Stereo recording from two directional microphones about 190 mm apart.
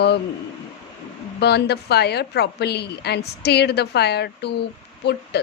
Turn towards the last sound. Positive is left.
turn(degrees=60)  # may be behind; listen again after turning